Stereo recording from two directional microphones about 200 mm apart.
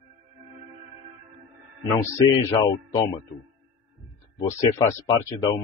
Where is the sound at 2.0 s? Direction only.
15° left (ahead or behind).